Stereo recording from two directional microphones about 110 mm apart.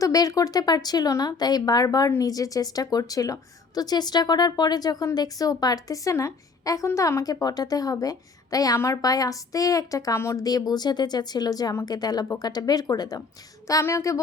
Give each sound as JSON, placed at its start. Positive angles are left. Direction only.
{"t": 0.0, "sound": "speech", "side_deg": 35}